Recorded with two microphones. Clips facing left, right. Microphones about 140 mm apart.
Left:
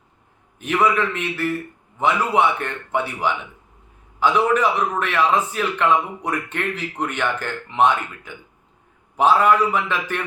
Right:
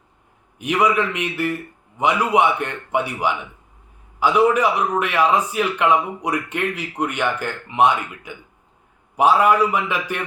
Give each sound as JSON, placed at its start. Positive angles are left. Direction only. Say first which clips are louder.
{"t": 0.6, "sound": "a man's voice", "louder": "right 1 dB", "side_deg": -15}